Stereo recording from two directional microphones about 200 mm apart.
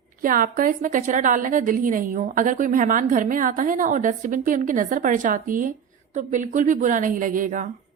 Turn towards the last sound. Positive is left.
turn(degrees=-40)  # may be behind; listen again after turning